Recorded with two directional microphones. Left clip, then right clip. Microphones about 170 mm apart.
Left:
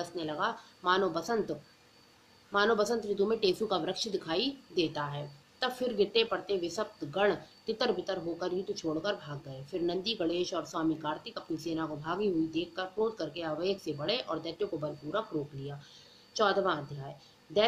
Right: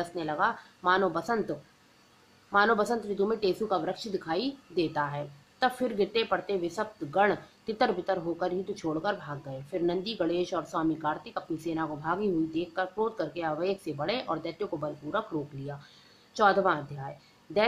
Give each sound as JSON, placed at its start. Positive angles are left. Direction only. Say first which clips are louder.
{"t": 0.0, "sound": "speech", "louder": "right 5 dB", "side_deg": -30}
{"t": 2.5, "sound": "speech", "louder": "right 3 dB", "side_deg": -35}
{"t": 16.3, "sound": "speech", "louder": "right 4 dB", "side_deg": -35}